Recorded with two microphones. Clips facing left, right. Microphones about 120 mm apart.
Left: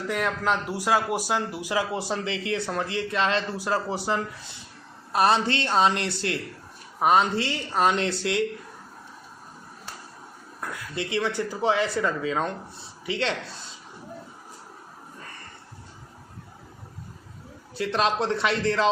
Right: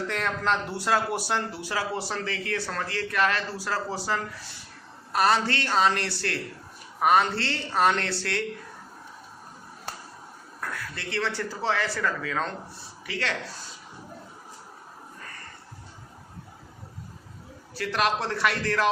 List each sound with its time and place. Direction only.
0.1 s speech: 10° left (ahead or behind)
10.6 s speech: 15° left (ahead or behind)
17.7 s speech: 20° left (ahead or behind)